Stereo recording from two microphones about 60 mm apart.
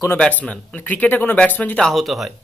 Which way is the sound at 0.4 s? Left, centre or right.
Left.